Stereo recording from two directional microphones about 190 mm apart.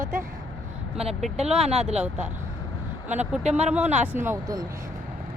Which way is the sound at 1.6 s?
35° right (ahead or behind).